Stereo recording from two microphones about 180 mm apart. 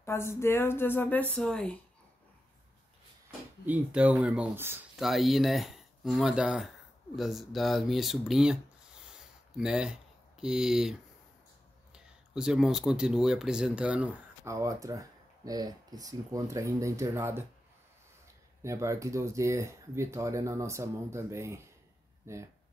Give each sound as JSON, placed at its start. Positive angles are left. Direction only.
{"t": 0.0, "sound": "speech", "side_deg": 15}
{"t": 3.6, "sound": "speech", "side_deg": -10}
{"t": 9.1, "sound": "a sound", "side_deg": -5}
{"t": 10.4, "sound": "speech", "side_deg": -5}
{"t": 18.6, "sound": "speech", "side_deg": -15}